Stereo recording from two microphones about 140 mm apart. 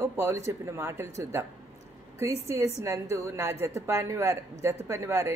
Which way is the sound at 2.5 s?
20° right (ahead or behind).